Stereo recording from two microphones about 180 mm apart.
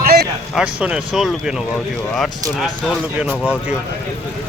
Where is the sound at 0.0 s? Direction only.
65° right (ahead or behind).